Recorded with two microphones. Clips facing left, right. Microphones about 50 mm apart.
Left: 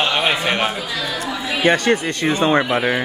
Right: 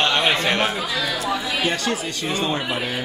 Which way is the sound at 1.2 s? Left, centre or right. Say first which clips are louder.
Left 4 dB; left.